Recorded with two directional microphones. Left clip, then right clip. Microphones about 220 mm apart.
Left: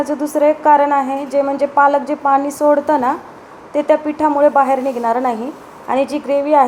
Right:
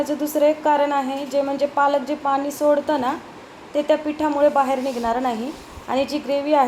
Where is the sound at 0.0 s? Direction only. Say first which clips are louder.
Left 4 dB; 15° left (ahead or behind).